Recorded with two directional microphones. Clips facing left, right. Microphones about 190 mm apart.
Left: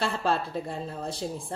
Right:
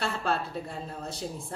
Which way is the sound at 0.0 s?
30° left (ahead or behind).